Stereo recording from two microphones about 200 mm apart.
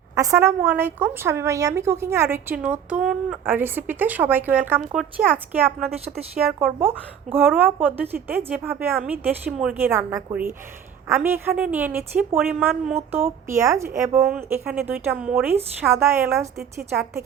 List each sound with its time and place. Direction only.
0.2 s speech: 15° right (ahead or behind)
7.3 s speech: 10° right (ahead or behind)